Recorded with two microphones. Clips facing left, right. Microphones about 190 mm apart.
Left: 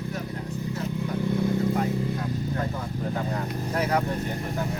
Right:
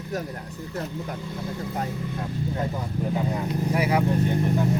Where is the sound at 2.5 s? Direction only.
10° right (ahead or behind).